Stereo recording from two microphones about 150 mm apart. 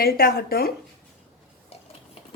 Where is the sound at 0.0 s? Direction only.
85° left.